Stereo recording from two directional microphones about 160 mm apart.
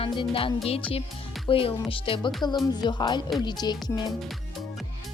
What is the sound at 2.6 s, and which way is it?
A woman's voice, 25° left (ahead or behind).